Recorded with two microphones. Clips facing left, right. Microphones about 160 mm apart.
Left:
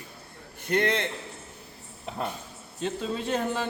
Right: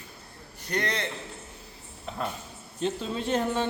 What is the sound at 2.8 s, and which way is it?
Speech, 5° left (ahead or behind).